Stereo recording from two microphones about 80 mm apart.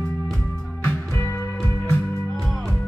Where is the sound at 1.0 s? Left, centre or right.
Left.